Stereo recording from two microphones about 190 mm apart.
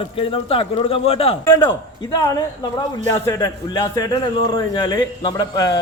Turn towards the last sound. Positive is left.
turn(degrees=20)  # may be behind; listen again after turning